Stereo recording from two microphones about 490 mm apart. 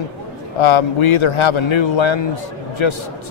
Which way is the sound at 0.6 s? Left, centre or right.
Left.